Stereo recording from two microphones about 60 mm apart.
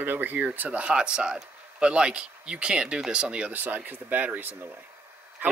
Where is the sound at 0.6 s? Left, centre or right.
Right.